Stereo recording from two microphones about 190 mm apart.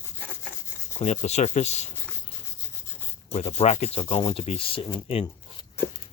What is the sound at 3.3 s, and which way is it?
Speech, 35° left (ahead or behind).